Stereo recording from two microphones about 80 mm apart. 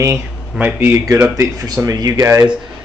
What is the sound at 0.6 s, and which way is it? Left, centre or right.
Speech, right.